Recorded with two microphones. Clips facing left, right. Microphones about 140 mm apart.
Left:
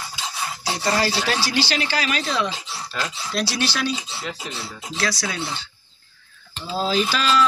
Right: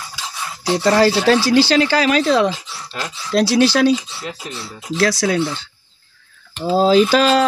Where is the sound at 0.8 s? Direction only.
70° right (ahead or behind).